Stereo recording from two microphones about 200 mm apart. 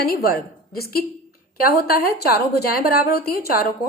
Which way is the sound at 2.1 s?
50° left (ahead or behind).